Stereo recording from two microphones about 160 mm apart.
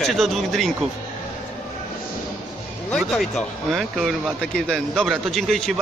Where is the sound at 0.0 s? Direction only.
Centre (ahead or behind).